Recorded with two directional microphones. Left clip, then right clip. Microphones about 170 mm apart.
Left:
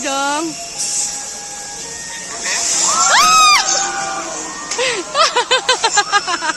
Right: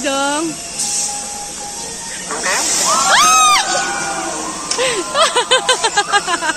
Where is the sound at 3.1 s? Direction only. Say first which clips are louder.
Left 1 dB; 10° left (ahead or behind).